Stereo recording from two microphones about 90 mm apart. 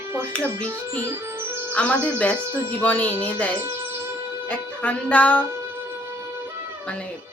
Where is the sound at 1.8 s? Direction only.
15° left (ahead or behind).